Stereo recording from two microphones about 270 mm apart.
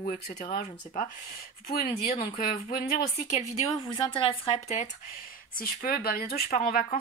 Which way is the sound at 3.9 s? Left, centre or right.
Centre.